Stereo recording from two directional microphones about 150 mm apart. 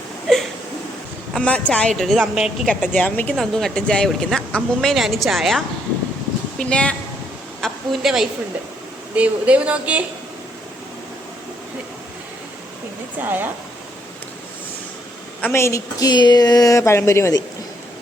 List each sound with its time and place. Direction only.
0.3 s a woman's voice: 5° left (ahead or behind)
13.2 s speech: 15° right (ahead or behind)
15.4 s speech: 15° left (ahead or behind)